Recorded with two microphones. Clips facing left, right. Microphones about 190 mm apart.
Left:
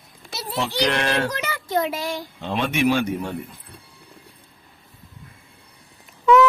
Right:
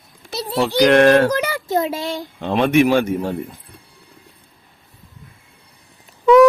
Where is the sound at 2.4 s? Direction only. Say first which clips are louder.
Right 7 dB; 55° right (ahead or behind).